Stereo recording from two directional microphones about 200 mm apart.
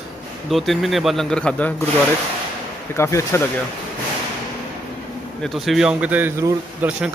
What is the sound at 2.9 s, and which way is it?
Speech, 15° left (ahead or behind).